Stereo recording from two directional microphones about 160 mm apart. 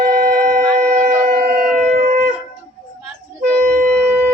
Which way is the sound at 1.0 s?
65° right (ahead or behind).